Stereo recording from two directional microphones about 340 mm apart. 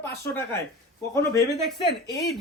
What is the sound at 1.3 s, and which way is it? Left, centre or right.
Speech, centre.